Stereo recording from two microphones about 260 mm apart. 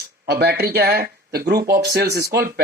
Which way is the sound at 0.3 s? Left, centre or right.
Right.